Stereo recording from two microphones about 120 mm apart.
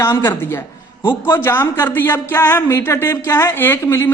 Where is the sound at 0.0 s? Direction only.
20° left (ahead or behind).